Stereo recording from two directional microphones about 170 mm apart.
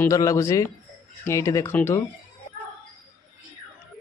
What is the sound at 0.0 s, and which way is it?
Speech, 20° left (ahead or behind).